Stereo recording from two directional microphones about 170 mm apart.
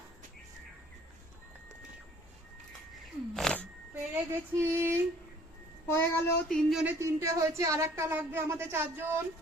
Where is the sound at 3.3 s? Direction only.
5° left (ahead or behind).